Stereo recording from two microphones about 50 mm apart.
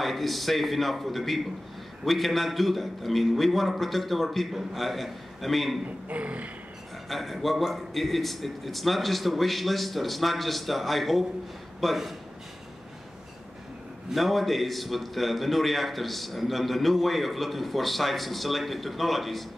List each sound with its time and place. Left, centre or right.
0.0 s a man's voice: centre
6.0 s a sound: right
7.1 s a man's voice: centre
14.1 s a man's voice: centre